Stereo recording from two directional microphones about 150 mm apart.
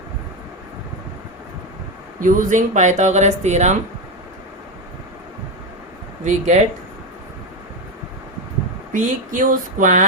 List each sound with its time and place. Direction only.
2.2 s speech: 60° right (ahead or behind)
6.2 s speech: 50° right (ahead or behind)
8.9 s speech: 60° right (ahead or behind)